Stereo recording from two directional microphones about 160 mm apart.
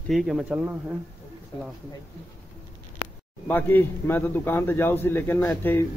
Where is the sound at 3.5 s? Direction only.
10° left (ahead or behind).